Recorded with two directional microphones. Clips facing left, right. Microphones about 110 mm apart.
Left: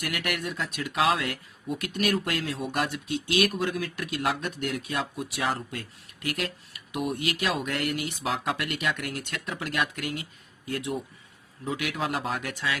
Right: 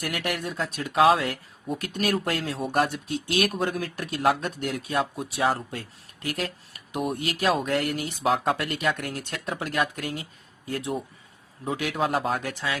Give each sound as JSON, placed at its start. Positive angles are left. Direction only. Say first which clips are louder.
{"t": 0.0, "sound": "speech", "louder": "right 2 dB", "side_deg": -35}